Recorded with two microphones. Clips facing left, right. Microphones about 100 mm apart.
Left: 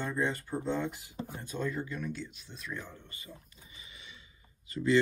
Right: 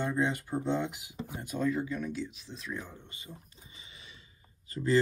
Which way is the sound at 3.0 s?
25° right (ahead or behind).